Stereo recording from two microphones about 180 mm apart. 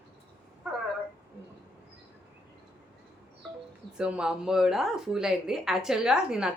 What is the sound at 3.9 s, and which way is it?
A woman's voice, 5° right (ahead or behind).